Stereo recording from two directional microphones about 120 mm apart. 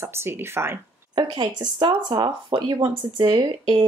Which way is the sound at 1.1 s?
40° right (ahead or behind).